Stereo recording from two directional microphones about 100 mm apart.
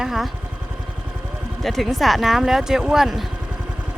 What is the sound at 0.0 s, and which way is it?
Speech, centre (ahead or behind).